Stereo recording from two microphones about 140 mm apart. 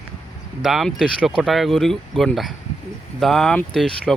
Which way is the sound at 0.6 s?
Centre (ahead or behind).